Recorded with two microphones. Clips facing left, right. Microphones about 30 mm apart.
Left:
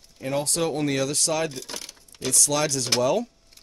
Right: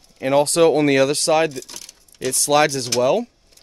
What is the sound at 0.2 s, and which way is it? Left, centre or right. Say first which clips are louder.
Speech: right 11 dB; right.